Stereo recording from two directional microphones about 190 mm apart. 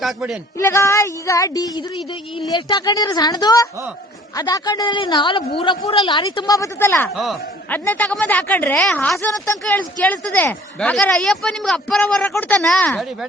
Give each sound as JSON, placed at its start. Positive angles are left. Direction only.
{"t": 0.0, "sound": "speech", "side_deg": 0}
{"t": 0.6, "sound": "a man's voice", "side_deg": 15}
{"t": 7.1, "sound": "speech", "side_deg": 0}